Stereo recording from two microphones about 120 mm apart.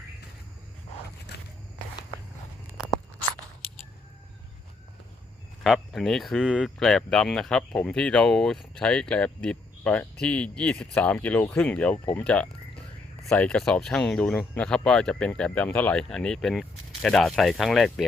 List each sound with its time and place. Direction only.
5.6 s speech: centre (ahead or behind)